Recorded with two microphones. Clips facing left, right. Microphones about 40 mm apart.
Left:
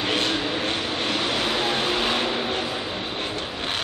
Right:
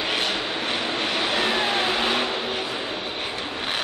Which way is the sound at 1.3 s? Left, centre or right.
Centre.